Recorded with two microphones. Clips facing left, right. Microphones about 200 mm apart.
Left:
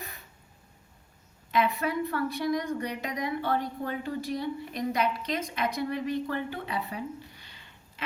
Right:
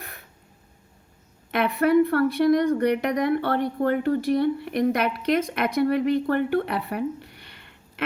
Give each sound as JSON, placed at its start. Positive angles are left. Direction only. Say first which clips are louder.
{"t": 1.5, "sound": "speech", "louder": "right 6 dB", "side_deg": -60}